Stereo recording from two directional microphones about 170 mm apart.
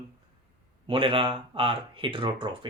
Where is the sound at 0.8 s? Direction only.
30° right (ahead or behind).